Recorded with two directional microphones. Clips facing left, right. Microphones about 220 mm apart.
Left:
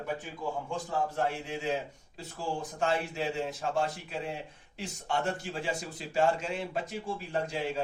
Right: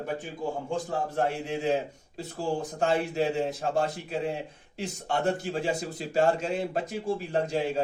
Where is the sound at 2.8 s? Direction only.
45° right (ahead or behind).